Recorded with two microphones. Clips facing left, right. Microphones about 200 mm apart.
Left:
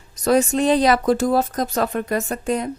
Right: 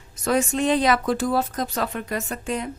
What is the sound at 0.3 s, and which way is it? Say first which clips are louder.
Speech: left 4 dB; 35° left (ahead or behind).